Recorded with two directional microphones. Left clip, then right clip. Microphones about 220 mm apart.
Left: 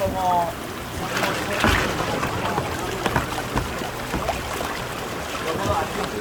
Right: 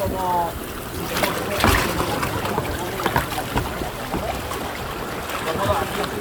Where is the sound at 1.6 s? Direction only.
45° right (ahead or behind).